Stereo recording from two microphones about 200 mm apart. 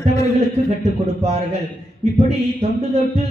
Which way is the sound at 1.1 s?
30° right (ahead or behind).